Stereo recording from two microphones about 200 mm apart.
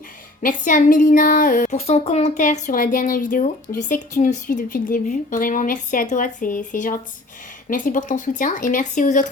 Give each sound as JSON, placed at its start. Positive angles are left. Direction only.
{"t": 0.4, "sound": "speech", "side_deg": 40}